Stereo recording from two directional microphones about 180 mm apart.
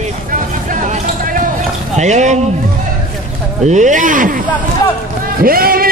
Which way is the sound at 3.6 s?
40° right (ahead or behind).